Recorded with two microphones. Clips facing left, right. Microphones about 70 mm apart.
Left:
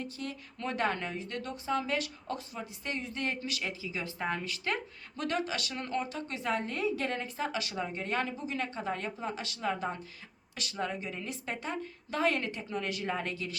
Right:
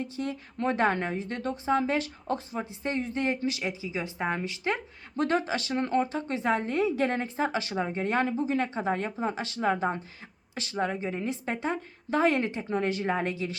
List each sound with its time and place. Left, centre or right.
0.0 s a woman's voice: right